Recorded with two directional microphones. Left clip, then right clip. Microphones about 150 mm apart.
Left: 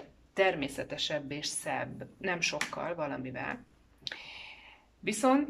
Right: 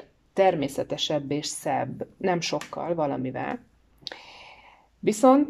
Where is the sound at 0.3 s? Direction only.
40° right (ahead or behind).